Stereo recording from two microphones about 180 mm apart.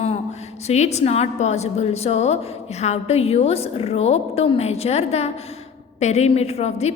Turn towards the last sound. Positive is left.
turn(degrees=35)  # may be behind; listen again after turning